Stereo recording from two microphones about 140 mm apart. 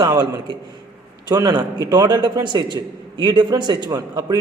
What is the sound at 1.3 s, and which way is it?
Speech, 30° right (ahead or behind).